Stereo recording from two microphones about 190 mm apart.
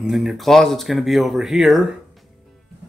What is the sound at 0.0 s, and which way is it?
Speech, centre (ahead or behind).